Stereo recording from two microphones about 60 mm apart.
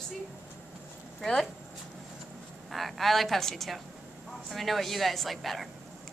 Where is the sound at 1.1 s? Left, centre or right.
Centre.